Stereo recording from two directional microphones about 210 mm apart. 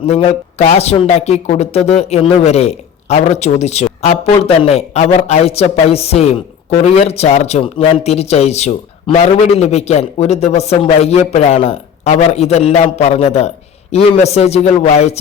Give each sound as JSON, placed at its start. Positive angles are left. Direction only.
{"t": 0.0, "sound": "speech", "side_deg": 30}